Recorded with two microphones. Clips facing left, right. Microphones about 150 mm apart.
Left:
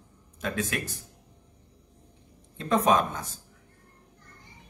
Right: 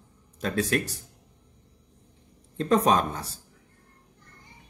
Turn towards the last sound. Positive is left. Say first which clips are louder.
# even
turn(degrees=-35)  # may be behind; listen again after turning